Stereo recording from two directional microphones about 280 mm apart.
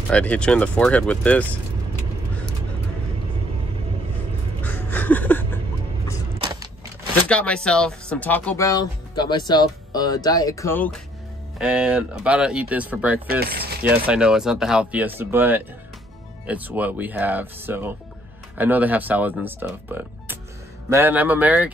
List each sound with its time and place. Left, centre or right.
0.1 s speech: centre
4.6 s a sound: centre
6.4 s a sound: centre
7.2 s speech: centre
13.3 s mechanisms: right
13.8 s speech: centre